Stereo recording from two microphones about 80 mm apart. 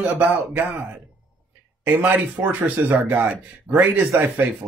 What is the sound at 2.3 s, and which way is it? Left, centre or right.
Speech, right.